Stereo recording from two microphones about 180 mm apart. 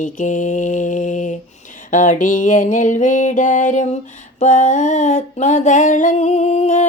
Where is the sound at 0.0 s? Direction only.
45° left (ahead or behind).